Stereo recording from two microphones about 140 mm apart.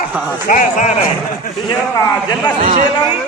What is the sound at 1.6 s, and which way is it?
Speech, 30° left (ahead or behind).